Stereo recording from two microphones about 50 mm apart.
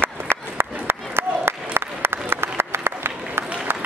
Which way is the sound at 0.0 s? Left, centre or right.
Right.